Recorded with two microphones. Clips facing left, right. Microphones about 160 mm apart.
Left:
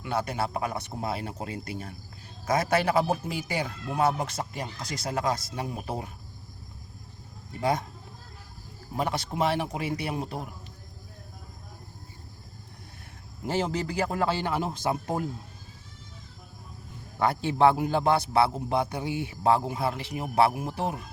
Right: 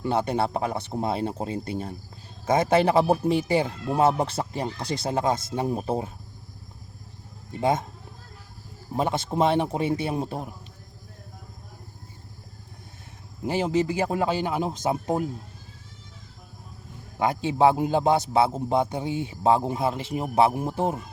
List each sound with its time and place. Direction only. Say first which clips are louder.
0.0 s a man's voice: right 5 dB; 30° right (ahead or behind)
7.6 s a man's voice: right 3 dB; 25° right (ahead or behind)
9.0 s a man's voice: right 4 dB; 25° right (ahead or behind)
13.4 s a man's voice: right 5 dB; 15° right (ahead or behind)
17.2 s a man's voice: right 2 dB; 15° right (ahead or behind)